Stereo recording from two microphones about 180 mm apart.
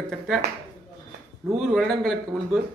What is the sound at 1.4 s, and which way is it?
A man's voice, 5° right (ahead or behind).